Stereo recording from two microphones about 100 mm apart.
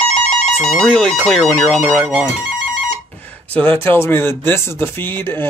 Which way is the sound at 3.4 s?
15° left (ahead or behind).